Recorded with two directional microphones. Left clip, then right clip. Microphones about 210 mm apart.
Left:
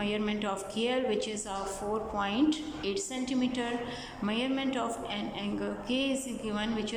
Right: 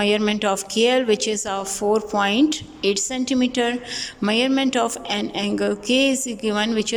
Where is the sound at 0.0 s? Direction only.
45° right (ahead or behind).